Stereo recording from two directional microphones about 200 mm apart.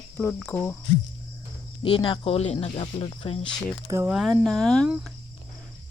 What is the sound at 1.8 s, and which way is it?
Speech, 25° left (ahead or behind).